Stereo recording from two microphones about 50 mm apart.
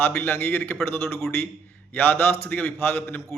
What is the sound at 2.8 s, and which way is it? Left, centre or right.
Speech, left.